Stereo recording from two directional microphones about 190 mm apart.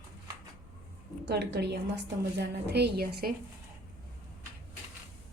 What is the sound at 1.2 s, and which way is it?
A woman's voice, 65° right (ahead or behind).